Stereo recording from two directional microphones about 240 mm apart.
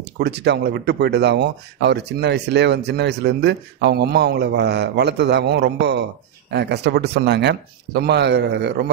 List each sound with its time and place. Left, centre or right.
0.0 s speech: right